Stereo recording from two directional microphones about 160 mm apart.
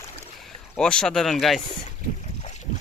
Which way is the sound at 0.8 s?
5° left (ahead or behind).